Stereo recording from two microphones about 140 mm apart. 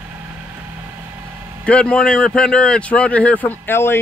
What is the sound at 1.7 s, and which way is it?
A man's voice, 5° left (ahead or behind).